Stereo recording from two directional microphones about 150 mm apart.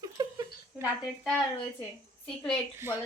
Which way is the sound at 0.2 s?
25° right (ahead or behind).